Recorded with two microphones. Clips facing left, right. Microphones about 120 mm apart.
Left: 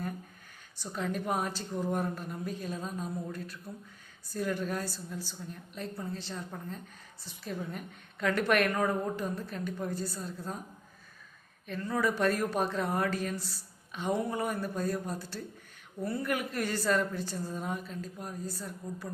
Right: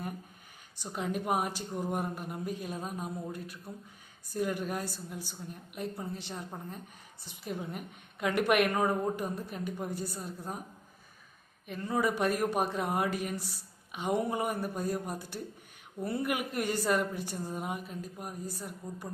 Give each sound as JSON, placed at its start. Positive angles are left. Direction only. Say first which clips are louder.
{"t": 0.8, "sound": "a woman's voice", "louder": "even", "side_deg": -15}
{"t": 11.7, "sound": "a woman's voice", "louder": "even", "side_deg": -15}